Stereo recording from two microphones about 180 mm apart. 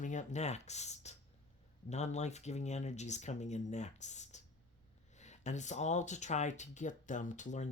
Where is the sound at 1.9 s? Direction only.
40° left (ahead or behind).